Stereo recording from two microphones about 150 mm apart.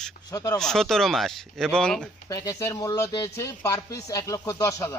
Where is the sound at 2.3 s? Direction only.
25° left (ahead or behind).